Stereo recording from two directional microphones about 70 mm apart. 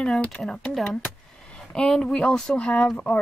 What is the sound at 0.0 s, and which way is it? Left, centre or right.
Speech, centre.